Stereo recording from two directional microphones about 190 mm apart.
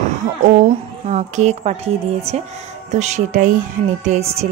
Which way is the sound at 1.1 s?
40° right (ahead or behind).